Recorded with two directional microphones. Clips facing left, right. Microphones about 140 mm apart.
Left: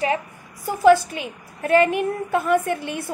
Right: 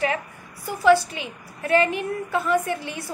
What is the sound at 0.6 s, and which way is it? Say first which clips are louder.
A woman's voice: left 3 dB; 45° left (ahead or behind).